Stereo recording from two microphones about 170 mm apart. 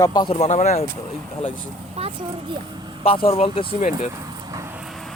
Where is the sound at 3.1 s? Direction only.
35° left (ahead or behind).